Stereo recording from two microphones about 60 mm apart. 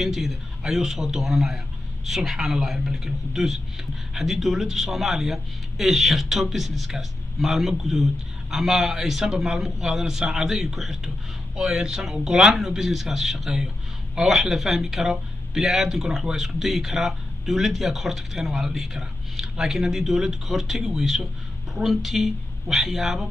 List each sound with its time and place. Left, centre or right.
0.0 s speech: centre